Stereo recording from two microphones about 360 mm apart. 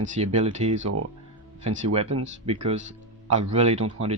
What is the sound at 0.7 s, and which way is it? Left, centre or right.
Speech, right.